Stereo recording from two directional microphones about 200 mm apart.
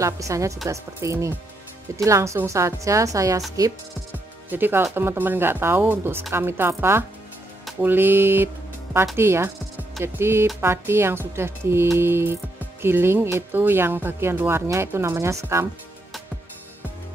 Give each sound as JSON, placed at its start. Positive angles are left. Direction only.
{"t": 0.0, "sound": "speech", "side_deg": -15}